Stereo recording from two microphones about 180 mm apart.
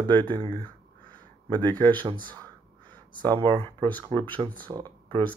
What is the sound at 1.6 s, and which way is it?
Speech, 25° right (ahead or behind).